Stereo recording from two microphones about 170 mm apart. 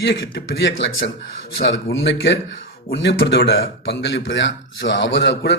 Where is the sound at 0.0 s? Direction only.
90° left.